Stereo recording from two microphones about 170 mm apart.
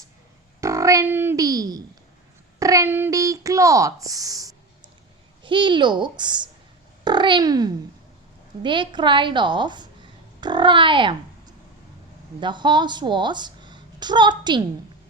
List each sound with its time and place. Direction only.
0.6 s a child's voice: 20° right (ahead or behind)